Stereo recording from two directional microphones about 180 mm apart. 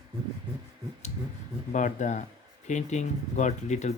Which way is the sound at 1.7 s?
45° left (ahead or behind).